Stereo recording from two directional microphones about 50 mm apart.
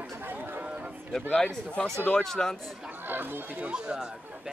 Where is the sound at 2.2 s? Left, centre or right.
Centre.